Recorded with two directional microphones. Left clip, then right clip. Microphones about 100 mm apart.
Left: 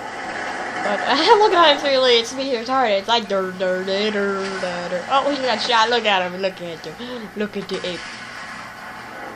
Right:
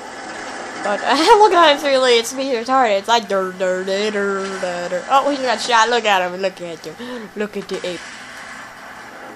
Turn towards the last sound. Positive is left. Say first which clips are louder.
# right 1 dB
turn(degrees=-45)  # may be behind; listen again after turning